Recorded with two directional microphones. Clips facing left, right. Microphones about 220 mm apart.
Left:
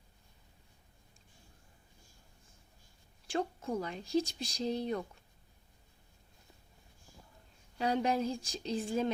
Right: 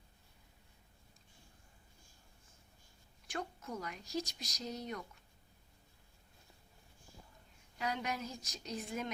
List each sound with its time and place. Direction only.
3.2 s speech: 30° left (ahead or behind)
7.8 s speech: 30° left (ahead or behind)